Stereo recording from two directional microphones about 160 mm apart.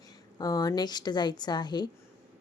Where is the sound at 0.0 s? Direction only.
25° left (ahead or behind).